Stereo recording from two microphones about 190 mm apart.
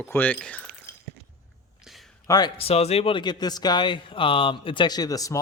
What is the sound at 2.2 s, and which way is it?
Speech, 20° left (ahead or behind).